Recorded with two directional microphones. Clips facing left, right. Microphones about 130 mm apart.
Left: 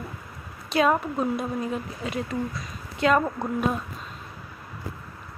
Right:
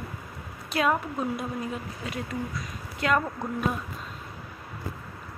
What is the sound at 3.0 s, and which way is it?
Speech, 20° left (ahead or behind).